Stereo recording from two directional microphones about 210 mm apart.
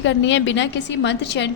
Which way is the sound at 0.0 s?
60° left (ahead or behind).